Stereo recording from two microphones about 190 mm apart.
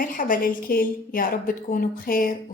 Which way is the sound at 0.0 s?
45° left (ahead or behind).